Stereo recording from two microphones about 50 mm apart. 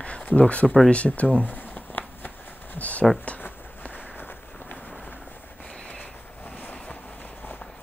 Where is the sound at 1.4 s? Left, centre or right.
Left.